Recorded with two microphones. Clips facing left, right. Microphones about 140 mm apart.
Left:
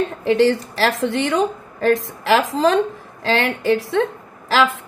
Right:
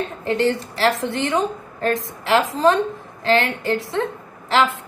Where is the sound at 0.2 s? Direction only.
80° left.